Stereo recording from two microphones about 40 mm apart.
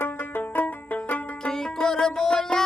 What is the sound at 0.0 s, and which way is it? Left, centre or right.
Music, left.